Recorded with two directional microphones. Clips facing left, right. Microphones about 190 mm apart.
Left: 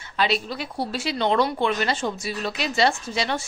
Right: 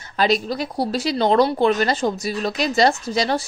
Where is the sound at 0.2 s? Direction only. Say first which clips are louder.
Right 5 dB; 40° right (ahead or behind).